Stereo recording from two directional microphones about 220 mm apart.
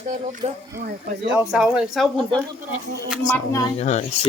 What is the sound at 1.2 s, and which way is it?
Speech, 5° right (ahead or behind).